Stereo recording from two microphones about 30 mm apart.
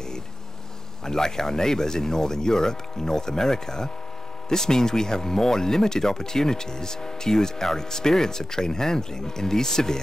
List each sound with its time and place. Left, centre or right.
1.0 s speech: centre